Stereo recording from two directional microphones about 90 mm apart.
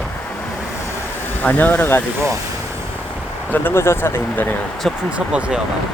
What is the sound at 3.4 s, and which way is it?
Speech, 20° left (ahead or behind).